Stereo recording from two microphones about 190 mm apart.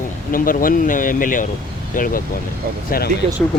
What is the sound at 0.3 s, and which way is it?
Speech, 45° left (ahead or behind).